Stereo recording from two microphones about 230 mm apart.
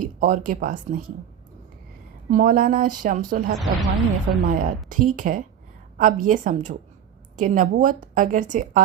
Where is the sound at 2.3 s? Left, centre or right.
Right.